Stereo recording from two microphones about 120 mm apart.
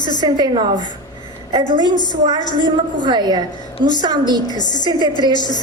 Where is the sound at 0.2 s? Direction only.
40° right (ahead or behind).